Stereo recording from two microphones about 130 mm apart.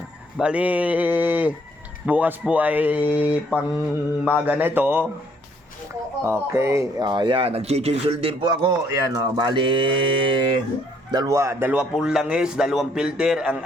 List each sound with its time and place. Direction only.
0.3 s speech: 10° right (ahead or behind)
6.2 s speech: 20° right (ahead or behind)
7.1 s a man's voice: 35° right (ahead or behind)
11.1 s speech: 30° right (ahead or behind)
11.7 s a man's voice: 5° right (ahead or behind)